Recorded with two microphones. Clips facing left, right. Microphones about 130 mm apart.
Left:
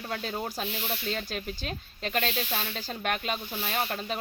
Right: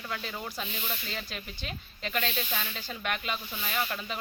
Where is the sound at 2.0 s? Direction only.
35° left (ahead or behind).